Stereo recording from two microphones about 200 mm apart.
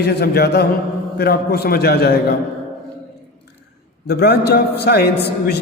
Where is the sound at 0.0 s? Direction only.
55° left (ahead or behind).